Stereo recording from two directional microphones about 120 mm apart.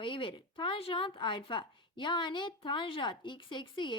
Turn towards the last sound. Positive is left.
turn(degrees=40)  # may be behind; listen again after turning